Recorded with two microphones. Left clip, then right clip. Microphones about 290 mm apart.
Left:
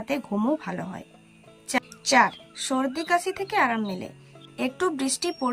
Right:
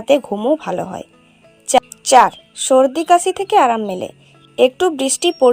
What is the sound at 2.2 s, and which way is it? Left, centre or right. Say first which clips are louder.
A woman's voice: right 6 dB; right.